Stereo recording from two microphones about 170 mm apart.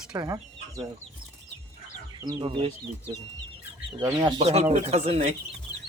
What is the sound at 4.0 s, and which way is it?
Speech, 25° right (ahead or behind).